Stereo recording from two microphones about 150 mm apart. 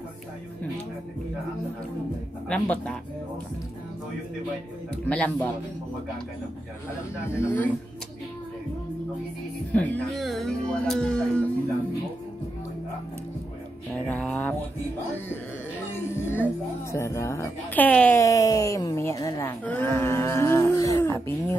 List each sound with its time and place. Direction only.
2.4 s speech: 5° left (ahead or behind)
5.0 s speech: 10° left (ahead or behind)
7.2 s speech: 15° left (ahead or behind)
9.7 s speech: 10° left (ahead or behind)
14.0 s a sound: 10° left (ahead or behind)
16.2 s music: 15° left (ahead or behind)
16.9 s speech: 20° left (ahead or behind)
18.2 s speech: 20° left (ahead or behind)
19.6 s a sound: 15° left (ahead or behind)